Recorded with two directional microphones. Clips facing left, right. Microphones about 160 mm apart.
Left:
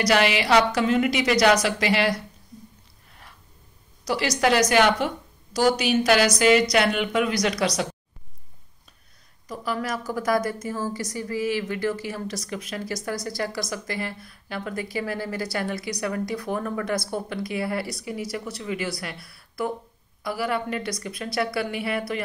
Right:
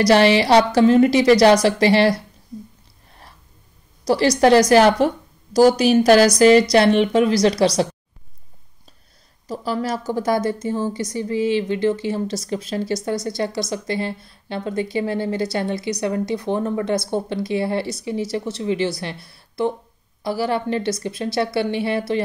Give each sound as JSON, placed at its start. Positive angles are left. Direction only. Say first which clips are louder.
{"t": 0.0, "sound": "speech", "louder": "right 7 dB", "side_deg": -35}
{"t": 4.0, "sound": "a woman's voice", "louder": "right 8 dB", "side_deg": -35}
{"t": 9.5, "sound": "a woman's voice", "louder": "right 5 dB", "side_deg": -30}